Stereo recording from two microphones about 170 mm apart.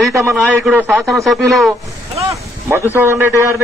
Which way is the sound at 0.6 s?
10° right (ahead or behind).